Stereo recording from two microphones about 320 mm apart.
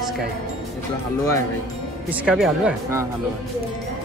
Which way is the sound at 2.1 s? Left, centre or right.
Centre.